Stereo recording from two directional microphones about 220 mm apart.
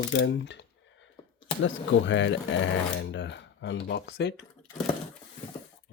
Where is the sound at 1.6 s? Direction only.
55° left (ahead or behind).